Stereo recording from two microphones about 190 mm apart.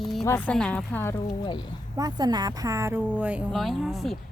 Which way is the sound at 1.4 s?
25° left (ahead or behind).